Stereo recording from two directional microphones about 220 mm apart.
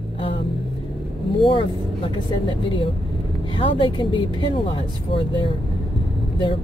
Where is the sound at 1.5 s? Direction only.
20° left (ahead or behind).